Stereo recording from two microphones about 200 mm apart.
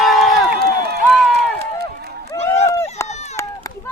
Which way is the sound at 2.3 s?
30° left (ahead or behind).